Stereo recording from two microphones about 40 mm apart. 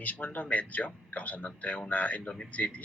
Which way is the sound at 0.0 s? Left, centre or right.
Left.